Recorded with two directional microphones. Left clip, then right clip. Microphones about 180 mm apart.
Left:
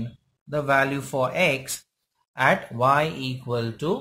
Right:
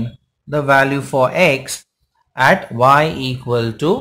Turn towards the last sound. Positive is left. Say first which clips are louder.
# right 10 dB
turn(degrees=-15)  # may be behind; listen again after turning